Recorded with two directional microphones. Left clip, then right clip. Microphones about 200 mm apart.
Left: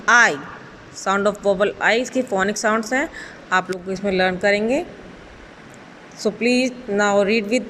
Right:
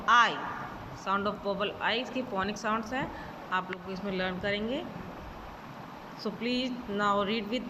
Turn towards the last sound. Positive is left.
turn(degrees=40)  # may be behind; listen again after turning